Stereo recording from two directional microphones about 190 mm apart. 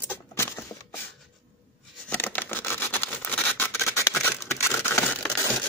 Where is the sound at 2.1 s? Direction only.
10° left (ahead or behind).